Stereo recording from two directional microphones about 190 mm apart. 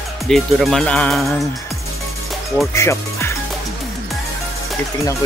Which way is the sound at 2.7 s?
15° left (ahead or behind).